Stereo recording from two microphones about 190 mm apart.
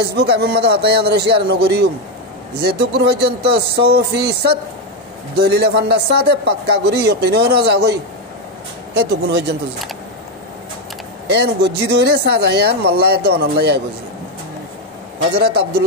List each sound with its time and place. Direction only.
0.0 s a man's voice: 60° right (ahead or behind)
11.2 s a man's voice: 60° right (ahead or behind)
15.3 s a man's voice: 55° right (ahead or behind)